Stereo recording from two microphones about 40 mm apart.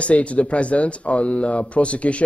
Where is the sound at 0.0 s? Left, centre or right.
Left.